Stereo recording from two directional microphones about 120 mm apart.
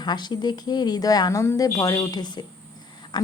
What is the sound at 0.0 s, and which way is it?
A woman's voice, 35° left (ahead or behind).